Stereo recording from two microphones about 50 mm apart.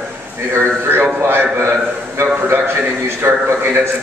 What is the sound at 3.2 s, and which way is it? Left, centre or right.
Speech, right.